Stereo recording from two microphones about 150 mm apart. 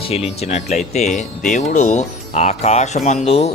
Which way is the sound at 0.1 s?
45° left (ahead or behind).